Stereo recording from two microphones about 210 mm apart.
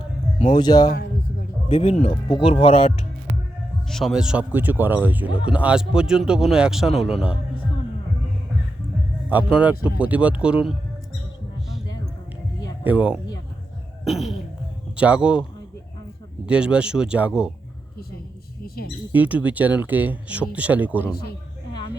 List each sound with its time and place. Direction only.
0.3 s a sound: 35° left (ahead or behind)
0.6 s speech: 20° left (ahead or behind)
3.8 s a man's voice: centre (ahead or behind)
9.3 s a man's voice: 5° right (ahead or behind)
12.8 s speech: 5° right (ahead or behind)
14.0 s a sound: centre (ahead or behind)
14.9 s a man's voice: 5° right (ahead or behind)
16.5 s a man's voice: 5° right (ahead or behind)
18.6 s a sound: 45° left (ahead or behind)
19.1 s speech: 5° right (ahead or behind)